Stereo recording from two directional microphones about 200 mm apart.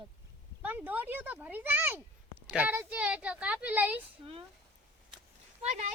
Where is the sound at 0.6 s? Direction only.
10° right (ahead or behind).